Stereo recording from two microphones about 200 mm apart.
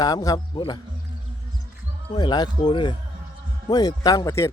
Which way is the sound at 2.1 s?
20° left (ahead or behind).